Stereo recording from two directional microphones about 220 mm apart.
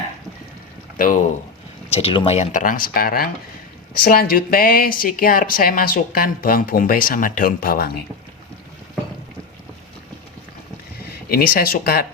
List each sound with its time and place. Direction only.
0.9 s speech: 40° left (ahead or behind)
1.9 s speech: 25° left (ahead or behind); by 7.9 s 40° left (ahead or behind)
11.3 s speech: 40° left (ahead or behind)